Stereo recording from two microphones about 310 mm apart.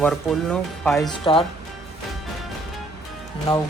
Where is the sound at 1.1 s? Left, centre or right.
Centre.